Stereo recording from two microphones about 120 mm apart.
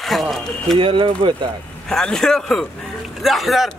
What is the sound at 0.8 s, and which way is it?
Speech, 45° right (ahead or behind).